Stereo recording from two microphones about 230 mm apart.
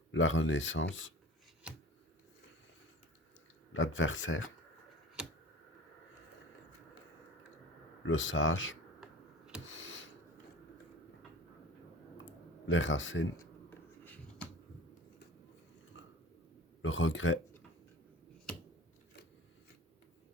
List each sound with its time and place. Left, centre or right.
0.1 s speech: left
3.7 s speech: left
8.0 s speech: left
9.6 s a sound: left
12.6 s speech: left
13.4 s finger snapping: centre
15.9 s chewing: left
16.8 s speech: left